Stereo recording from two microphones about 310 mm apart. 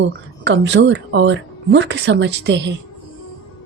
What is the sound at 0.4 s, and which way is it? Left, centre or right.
Speech, right.